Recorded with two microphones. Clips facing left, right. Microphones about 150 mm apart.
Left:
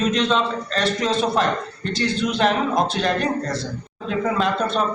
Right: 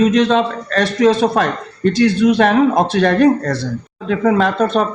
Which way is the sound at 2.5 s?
65° right (ahead or behind).